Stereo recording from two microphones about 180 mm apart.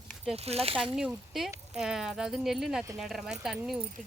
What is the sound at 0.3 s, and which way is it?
Speech, 35° right (ahead or behind).